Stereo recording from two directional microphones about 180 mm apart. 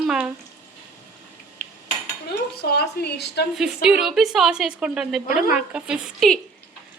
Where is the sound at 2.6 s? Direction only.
65° left (ahead or behind).